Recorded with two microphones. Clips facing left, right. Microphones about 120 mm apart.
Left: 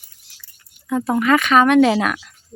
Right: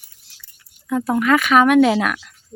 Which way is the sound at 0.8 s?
5° left (ahead or behind).